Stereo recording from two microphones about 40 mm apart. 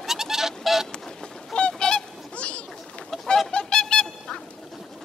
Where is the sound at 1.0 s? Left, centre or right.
Centre.